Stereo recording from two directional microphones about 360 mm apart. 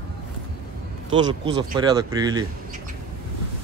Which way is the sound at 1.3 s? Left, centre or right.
Centre.